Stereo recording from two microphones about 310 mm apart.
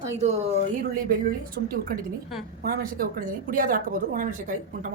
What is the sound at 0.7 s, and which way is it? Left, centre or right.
A woman's voice, right.